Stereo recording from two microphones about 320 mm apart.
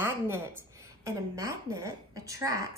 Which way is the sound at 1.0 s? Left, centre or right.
Centre.